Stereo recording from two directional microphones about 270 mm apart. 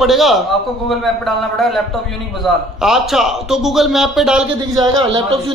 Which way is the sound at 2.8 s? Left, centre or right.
Centre.